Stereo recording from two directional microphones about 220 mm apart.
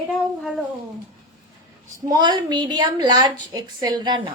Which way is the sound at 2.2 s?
20° right (ahead or behind).